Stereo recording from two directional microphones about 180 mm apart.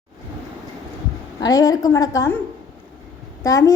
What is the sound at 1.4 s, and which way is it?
Speech, 20° left (ahead or behind).